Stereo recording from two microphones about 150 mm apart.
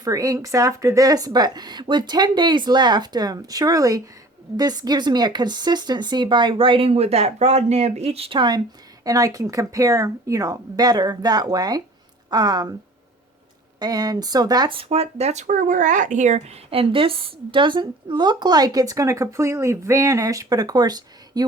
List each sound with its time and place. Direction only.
0.0 s speech: 25° right (ahead or behind)
13.7 s speech: 25° right (ahead or behind)
14.8 s speech: 45° right (ahead or behind); by 21.4 s 25° right (ahead or behind)